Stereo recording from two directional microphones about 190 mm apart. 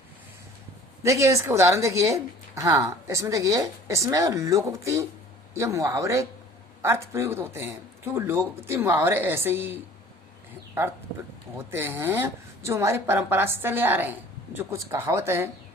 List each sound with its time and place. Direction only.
1.0 s a woman's voice: 15° right (ahead or behind)
11.5 s a woman's voice: 10° right (ahead or behind)